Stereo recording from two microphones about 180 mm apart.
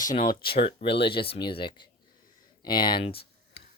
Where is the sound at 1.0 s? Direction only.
30° left (ahead or behind).